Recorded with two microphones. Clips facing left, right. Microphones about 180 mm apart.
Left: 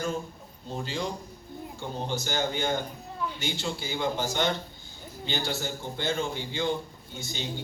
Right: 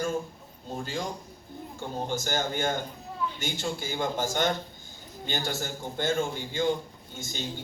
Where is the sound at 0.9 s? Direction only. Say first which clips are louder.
Left 2 dB; 45° right (ahead or behind).